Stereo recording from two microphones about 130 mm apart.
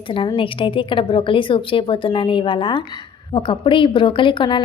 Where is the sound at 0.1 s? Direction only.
40° left (ahead or behind).